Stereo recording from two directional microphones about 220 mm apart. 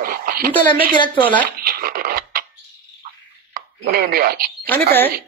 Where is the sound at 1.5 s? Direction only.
45° right (ahead or behind).